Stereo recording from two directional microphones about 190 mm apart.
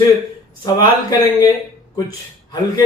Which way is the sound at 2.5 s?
20° left (ahead or behind).